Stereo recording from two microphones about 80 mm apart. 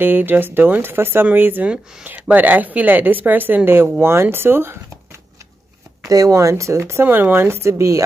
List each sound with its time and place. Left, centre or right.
0.0 s speech: right
6.0 s speech: right